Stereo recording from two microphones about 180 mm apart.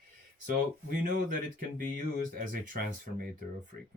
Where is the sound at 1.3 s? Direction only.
50° right (ahead or behind).